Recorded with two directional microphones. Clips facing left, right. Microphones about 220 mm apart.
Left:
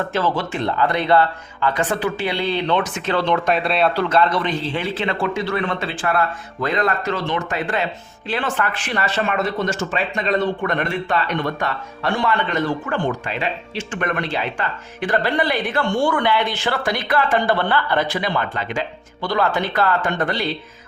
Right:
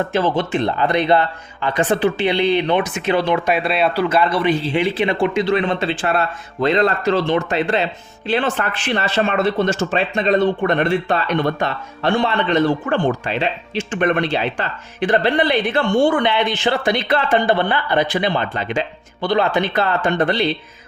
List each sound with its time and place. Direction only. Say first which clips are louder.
0.1 s speech: right 4 dB; 15° right (ahead or behind)
13.7 s speech: right 7 dB; 25° right (ahead or behind)